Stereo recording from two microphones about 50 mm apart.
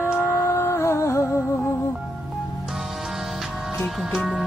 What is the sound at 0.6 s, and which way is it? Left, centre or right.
Music, left.